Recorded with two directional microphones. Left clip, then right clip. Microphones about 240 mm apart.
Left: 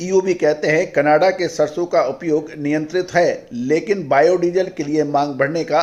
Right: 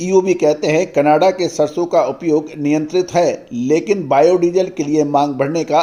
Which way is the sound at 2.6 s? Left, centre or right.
Right.